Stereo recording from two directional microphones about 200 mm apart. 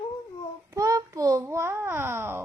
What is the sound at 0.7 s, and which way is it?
A child's voice, 15° right (ahead or behind).